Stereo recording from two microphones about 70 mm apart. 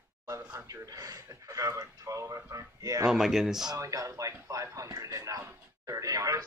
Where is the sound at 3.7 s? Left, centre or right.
Right.